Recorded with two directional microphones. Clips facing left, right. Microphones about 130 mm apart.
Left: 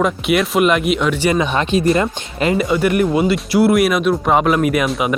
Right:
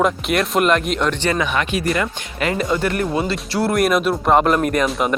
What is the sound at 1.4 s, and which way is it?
Speech, 25° left (ahead or behind).